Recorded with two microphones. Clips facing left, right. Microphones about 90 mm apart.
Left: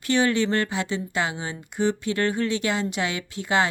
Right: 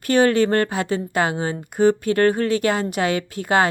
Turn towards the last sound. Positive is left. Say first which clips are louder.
# right 4 dB
turn(degrees=-45)  # may be behind; listen again after turning